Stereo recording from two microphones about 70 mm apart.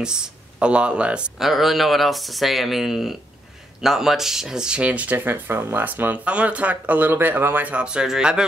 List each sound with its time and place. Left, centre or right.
0.0 s speech: centre
1.4 s speech: centre
5.1 s speech: right; by 8.5 s centre